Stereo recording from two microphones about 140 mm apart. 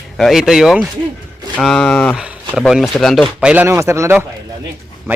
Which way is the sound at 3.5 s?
15° right (ahead or behind).